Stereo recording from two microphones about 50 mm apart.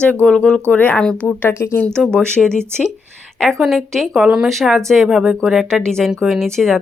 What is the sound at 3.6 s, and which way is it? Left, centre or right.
Speech, centre.